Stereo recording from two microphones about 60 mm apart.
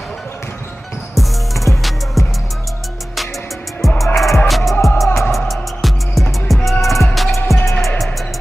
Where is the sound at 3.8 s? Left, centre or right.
Centre.